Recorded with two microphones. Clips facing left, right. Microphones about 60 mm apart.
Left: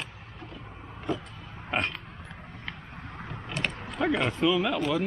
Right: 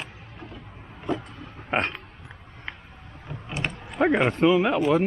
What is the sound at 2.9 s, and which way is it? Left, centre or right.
Vehicle, left.